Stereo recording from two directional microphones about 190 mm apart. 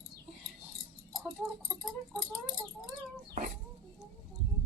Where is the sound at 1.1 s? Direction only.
Centre (ahead or behind).